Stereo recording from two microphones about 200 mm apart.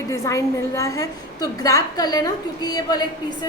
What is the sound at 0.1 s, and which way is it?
A woman's voice, 15° left (ahead or behind).